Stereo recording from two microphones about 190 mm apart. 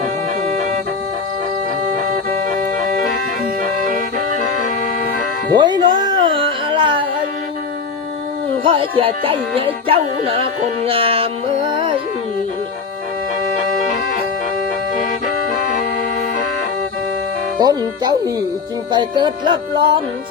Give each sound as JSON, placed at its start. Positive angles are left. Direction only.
{"t": 3.6, "sound": "music", "side_deg": -45}
{"t": 5.5, "sound": "music", "side_deg": -25}
{"t": 8.6, "sound": "speech", "side_deg": -25}
{"t": 17.6, "sound": "speech", "side_deg": -20}